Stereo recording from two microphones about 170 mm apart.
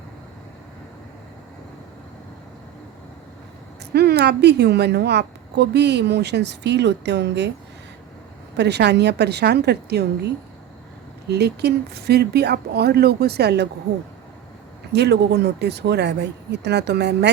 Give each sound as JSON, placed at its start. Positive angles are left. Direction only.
{"t": 3.9, "sound": "a woman's voice", "side_deg": -75}
{"t": 8.5, "sound": "a woman's voice", "side_deg": -85}
{"t": 11.3, "sound": "speech", "side_deg": -75}
{"t": 14.9, "sound": "a woman's voice", "side_deg": -75}